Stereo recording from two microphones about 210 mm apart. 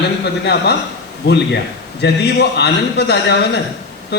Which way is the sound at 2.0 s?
55° left (ahead or behind).